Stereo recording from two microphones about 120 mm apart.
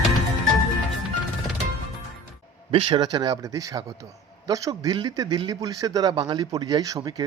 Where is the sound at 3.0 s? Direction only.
35° right (ahead or behind).